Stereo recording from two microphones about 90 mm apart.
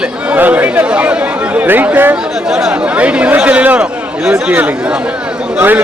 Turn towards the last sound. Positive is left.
turn(degrees=-20)  # may be behind; listen again after turning